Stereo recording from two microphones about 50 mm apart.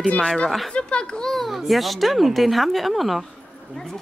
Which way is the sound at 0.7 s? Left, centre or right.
Centre.